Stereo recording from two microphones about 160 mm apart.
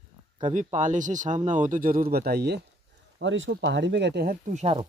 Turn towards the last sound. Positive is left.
turn(degrees=-45)  # may be behind; listen again after turning